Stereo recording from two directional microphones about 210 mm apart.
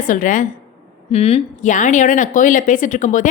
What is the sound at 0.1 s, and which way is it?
A woman's voice, 40° left (ahead or behind).